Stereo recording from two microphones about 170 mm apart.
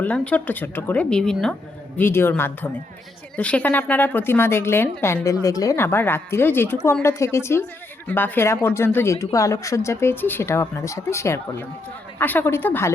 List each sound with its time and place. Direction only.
0.0 s a woman's voice: 10° left (ahead or behind)